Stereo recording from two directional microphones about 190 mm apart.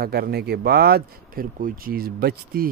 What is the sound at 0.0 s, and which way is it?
Speech, 55° right (ahead or behind).